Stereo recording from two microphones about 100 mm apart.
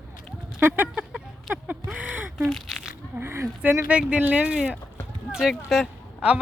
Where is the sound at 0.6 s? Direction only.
20° right (ahead or behind).